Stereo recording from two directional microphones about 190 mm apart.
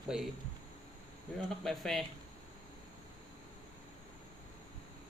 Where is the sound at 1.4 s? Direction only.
Centre (ahead or behind).